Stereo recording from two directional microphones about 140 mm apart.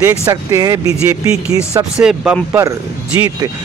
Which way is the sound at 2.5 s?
20° right (ahead or behind).